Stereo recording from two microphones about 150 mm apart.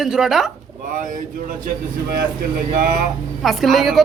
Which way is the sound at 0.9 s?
60° right (ahead or behind).